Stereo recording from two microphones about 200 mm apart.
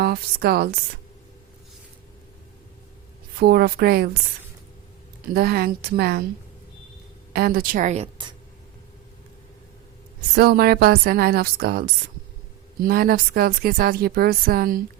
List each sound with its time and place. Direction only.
0.0 s speech: 50° right (ahead or behind)
3.3 s speech: 50° right (ahead or behind)
5.3 s speech: 50° right (ahead or behind)
7.3 s speech: 50° right (ahead or behind); by 8.3 s 30° right (ahead or behind)
10.3 s speech: 50° right (ahead or behind)